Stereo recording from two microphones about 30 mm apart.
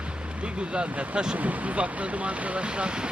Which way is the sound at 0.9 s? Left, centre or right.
Right.